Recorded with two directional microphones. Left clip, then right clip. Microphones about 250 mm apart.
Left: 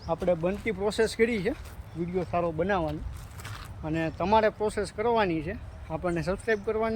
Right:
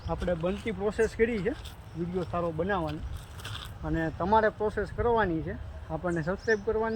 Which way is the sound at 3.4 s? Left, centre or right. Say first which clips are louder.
Even; centre.